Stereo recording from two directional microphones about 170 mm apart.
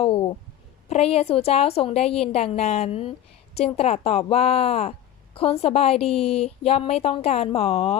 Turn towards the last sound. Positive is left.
turn(degrees=40)  # may be behind; listen again after turning